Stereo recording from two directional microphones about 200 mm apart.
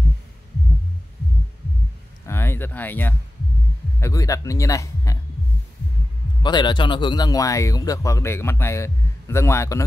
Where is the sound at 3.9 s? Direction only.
15° left (ahead or behind).